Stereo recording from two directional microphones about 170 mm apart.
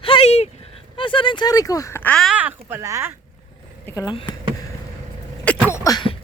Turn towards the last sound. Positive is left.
turn(degrees=25)  # may be behind; listen again after turning